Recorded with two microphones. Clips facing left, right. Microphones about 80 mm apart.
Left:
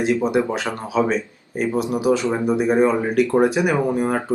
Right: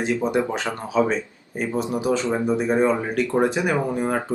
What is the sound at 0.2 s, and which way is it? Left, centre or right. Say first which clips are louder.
Speech: left 2 dB; centre.